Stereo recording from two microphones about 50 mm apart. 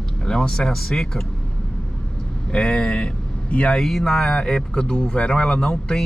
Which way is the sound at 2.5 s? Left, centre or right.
Left.